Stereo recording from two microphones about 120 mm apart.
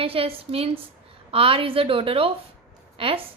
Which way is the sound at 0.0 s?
50° right (ahead or behind).